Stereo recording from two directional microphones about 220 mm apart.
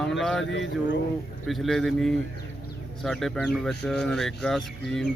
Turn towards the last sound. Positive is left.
turn(degrees=0)  # may be behind; listen again after turning